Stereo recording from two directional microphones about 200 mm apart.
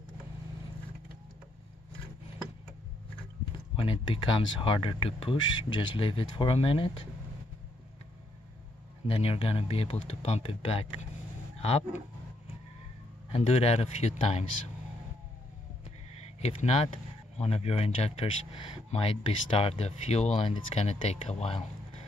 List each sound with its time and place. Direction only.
3.7 s speech: 25° left (ahead or behind)
9.0 s speech: 30° left (ahead or behind)
11.5 s a sound: 30° left (ahead or behind)
13.3 s speech: 30° left (ahead or behind)
16.2 s speech: 30° left (ahead or behind)